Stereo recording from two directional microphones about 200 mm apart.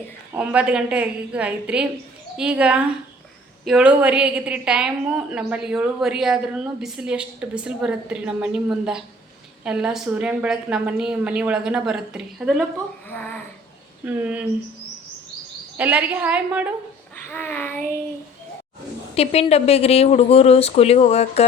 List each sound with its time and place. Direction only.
0.3 s a woman's voice: 5° right (ahead or behind)
13.1 s a sound: 10° left (ahead or behind)
14.0 s a woman's voice: 5° right (ahead or behind)
15.8 s a woman's voice: 10° right (ahead or behind)
17.3 s child singing: 10° left (ahead or behind)
19.1 s speech: 30° left (ahead or behind)